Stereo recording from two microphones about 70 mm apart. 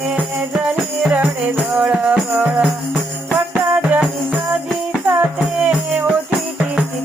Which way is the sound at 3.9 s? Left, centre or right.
Centre.